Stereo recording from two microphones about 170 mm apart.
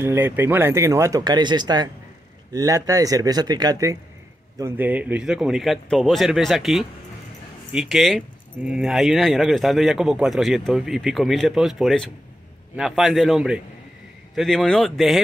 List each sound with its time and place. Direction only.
0.0 s a man's voice: 15° right (ahead or behind)